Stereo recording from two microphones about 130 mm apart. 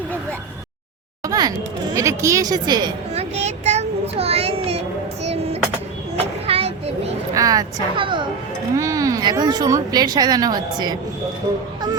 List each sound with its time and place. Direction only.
1.2 s a sound: 25° right (ahead or behind)
2.0 s speech: 25° right (ahead or behind)
3.2 s child singing: 60° right (ahead or behind)
5.2 s music: 55° right (ahead or behind)
6.1 s children playing: 50° right (ahead or behind)
7.3 s speech: 25° right (ahead or behind)
7.9 s a woman's voice: 40° right (ahead or behind)
8.7 s a woman's voice: 25° right (ahead or behind)